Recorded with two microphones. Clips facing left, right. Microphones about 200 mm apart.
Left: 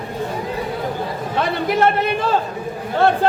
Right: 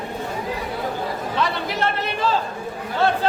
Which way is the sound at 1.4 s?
55° left (ahead or behind).